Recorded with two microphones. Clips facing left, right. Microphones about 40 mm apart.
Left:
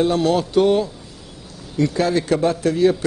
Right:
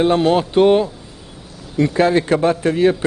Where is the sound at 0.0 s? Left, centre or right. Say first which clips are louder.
Right 3 dB; right.